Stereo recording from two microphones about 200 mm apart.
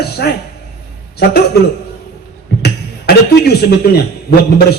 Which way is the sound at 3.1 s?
50° left (ahead or behind).